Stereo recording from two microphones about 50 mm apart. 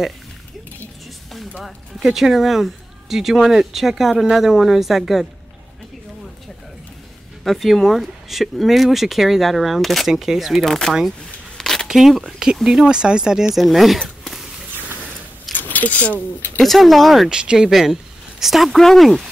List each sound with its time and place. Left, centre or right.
1.6 s speech: centre
7.4 s speech: centre
10.6 s speech: centre
11.5 s a sound: centre
11.9 s speech: centre
13.9 s a sound: centre
15.5 s a sound: left
16.6 s speech: centre
17.3 s speech: centre
17.6 s speech: centre